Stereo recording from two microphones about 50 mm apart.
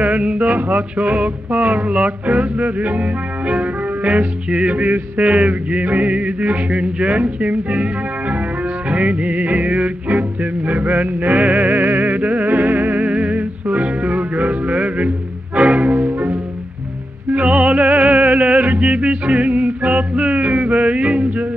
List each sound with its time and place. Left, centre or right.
0.0 s music: right
17.3 s music: right